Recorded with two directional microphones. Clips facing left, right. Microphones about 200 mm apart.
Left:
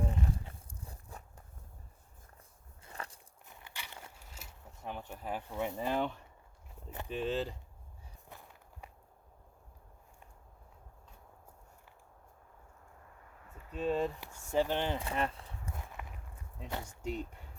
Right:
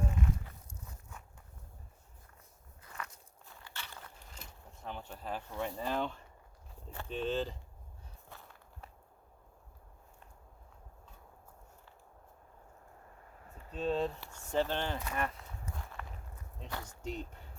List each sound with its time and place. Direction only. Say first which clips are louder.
0.0 s a sound: even; 30° left (ahead or behind)
2.8 s biting: left 1 dB; 30° left (ahead or behind)
3.4 s a sound: even; 20° left (ahead or behind)
6.9 s speech: even; 15° left (ahead or behind)
13.7 s speech: left 1 dB; 10° left (ahead or behind)
15.0 s speech: left 2 dB; 30° left (ahead or behind)
16.0 s walk: even; 10° left (ahead or behind)
16.8 s speech: left 2 dB; 10° left (ahead or behind)